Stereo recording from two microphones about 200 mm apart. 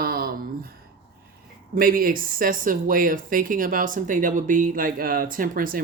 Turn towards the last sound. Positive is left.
turn(degrees=-45)  # may be behind; listen again after turning